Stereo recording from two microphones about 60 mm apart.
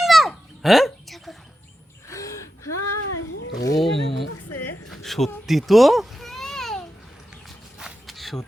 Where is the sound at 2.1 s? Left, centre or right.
Left.